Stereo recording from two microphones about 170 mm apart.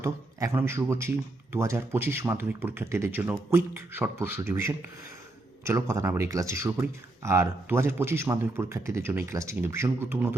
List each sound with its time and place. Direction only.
0.0 s speech: 15° right (ahead or behind)